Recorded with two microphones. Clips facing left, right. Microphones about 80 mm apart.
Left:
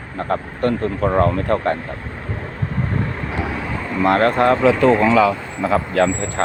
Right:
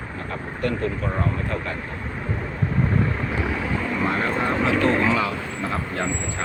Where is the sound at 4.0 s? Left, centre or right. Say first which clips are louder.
Left 11 dB; left.